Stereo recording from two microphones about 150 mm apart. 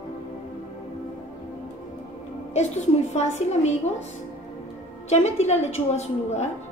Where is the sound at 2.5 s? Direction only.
50° left (ahead or behind).